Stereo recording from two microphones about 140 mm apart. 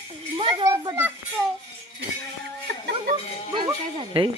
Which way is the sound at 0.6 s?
25° right (ahead or behind).